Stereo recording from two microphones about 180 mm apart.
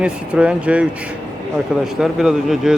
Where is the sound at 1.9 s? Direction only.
Centre (ahead or behind).